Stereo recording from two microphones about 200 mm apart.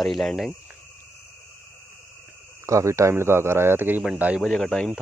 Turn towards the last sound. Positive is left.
turn(degrees=5)  # may be behind; listen again after turning